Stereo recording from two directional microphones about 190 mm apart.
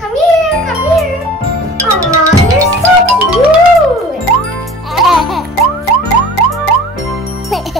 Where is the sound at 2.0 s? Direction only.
15° right (ahead or behind).